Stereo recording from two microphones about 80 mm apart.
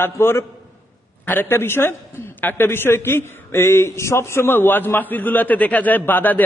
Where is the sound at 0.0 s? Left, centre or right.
Left.